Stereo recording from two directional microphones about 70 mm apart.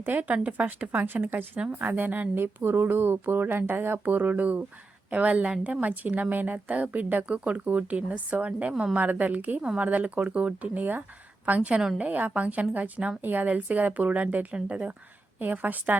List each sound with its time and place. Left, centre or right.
0.0 s a woman's voice: right